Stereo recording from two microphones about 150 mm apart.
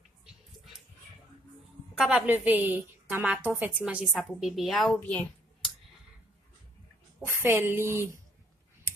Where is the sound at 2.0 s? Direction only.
10° right (ahead or behind); by 5.7 s 10° left (ahead or behind).